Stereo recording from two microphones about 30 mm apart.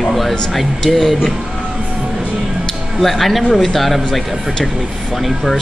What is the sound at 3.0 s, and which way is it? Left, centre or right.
Speech, centre.